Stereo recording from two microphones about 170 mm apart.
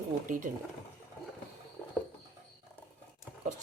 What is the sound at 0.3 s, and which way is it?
Speech, 50° right (ahead or behind).